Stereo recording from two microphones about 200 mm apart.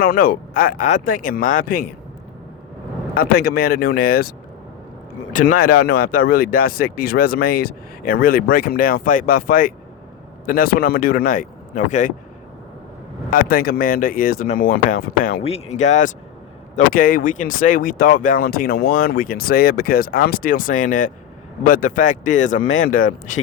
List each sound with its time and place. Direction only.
0.0 s speech: 45° left (ahead or behind)
3.2 s speech: 50° left (ahead or behind)
5.3 s speech: 40° left (ahead or behind)
13.3 s speech: 45° left (ahead or behind)
15.4 s speech: 30° left (ahead or behind)